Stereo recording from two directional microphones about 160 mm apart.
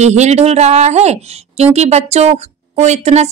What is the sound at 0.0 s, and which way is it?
A woman's voice, 45° right (ahead or behind).